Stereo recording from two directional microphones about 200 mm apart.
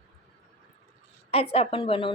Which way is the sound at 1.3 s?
30° left (ahead or behind).